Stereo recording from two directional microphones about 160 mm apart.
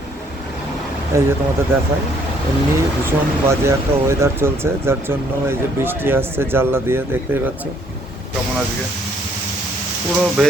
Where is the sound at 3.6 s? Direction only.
15° right (ahead or behind).